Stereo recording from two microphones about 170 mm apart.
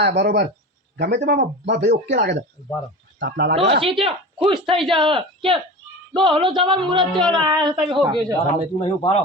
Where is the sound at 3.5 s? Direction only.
35° right (ahead or behind).